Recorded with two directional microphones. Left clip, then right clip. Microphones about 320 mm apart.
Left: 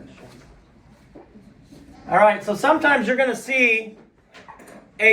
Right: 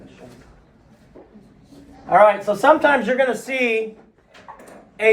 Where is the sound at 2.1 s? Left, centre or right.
Centre.